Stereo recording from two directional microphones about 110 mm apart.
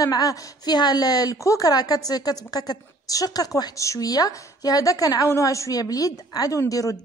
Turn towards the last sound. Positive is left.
turn(degrees=30)  # may be behind; listen again after turning